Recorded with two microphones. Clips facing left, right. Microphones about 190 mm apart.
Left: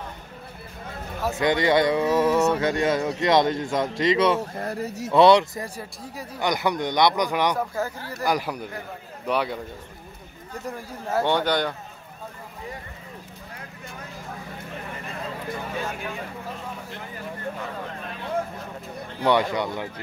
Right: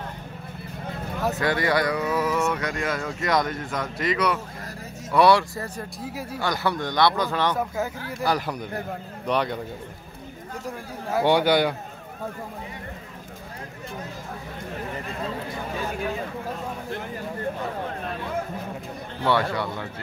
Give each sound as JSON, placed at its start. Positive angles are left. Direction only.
{"t": 1.4, "sound": "speech", "side_deg": 20}
{"t": 4.4, "sound": "speech", "side_deg": 65}
{"t": 5.1, "sound": "speech", "side_deg": 20}
{"t": 7.5, "sound": "speech", "side_deg": -5}
{"t": 8.3, "sound": "speech", "side_deg": 10}
{"t": 11.1, "sound": "speech", "side_deg": -10}
{"t": 19.2, "sound": "speech", "side_deg": 20}